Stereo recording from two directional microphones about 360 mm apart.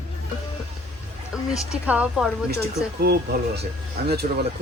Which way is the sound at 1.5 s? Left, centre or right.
Centre.